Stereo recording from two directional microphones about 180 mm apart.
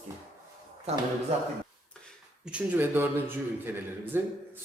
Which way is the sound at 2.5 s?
10° right (ahead or behind).